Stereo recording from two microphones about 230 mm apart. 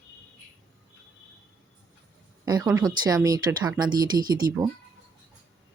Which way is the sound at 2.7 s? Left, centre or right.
Centre.